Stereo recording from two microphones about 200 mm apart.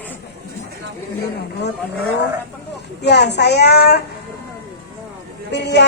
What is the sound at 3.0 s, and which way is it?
A woman's voice, 60° left (ahead or behind).